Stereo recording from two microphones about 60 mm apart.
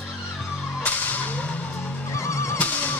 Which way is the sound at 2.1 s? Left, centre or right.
Left.